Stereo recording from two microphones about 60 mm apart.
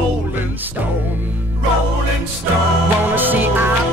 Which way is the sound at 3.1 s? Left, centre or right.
Right.